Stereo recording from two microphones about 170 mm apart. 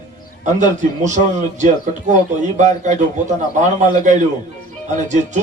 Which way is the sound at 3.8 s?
45° right (ahead or behind).